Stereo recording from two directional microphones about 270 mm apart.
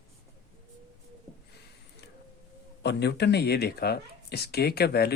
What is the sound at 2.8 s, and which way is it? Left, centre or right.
Speech, left.